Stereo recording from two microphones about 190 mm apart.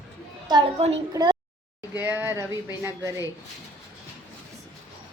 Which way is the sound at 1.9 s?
10° right (ahead or behind).